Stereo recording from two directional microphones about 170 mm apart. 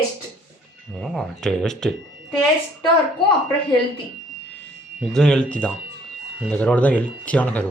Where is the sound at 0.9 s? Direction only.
Centre (ahead or behind).